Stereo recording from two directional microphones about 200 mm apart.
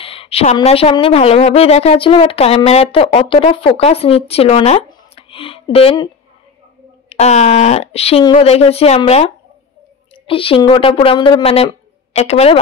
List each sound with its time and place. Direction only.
0.0 s a woman's voice: 30° left (ahead or behind)
7.1 s a woman's voice: 35° left (ahead or behind)